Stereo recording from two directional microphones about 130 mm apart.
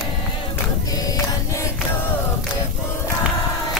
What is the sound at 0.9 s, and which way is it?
Music, 25° left (ahead or behind).